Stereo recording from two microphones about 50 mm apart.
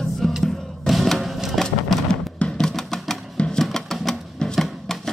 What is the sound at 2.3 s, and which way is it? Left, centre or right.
Music, left.